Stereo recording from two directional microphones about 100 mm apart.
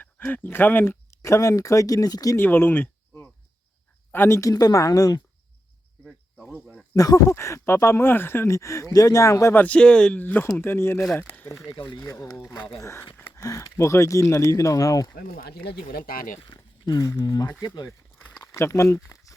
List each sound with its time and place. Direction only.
0.3 s speech: 20° left (ahead or behind); by 2.4 s 40° left (ahead or behind)
2.4 s speech: 20° left (ahead or behind)
4.4 s speech: 35° left (ahead or behind)
6.1 s cricket: 5° right (ahead or behind)
6.9 s speech: 35° left (ahead or behind)
9.6 s speech: 10° left (ahead or behind)
11.1 s speech: 15° left (ahead or behind)
12.0 s speech: 30° left (ahead or behind)
16.4 s a sound: 45° left (ahead or behind)
17.2 s speech: 40° left (ahead or behind)
18.3 s a sound: 25° left (ahead or behind)